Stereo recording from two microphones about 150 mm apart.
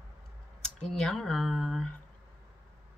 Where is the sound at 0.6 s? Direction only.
5° left (ahead or behind).